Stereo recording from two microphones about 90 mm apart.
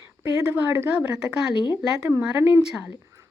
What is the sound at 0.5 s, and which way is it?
A woman's voice, 25° right (ahead or behind).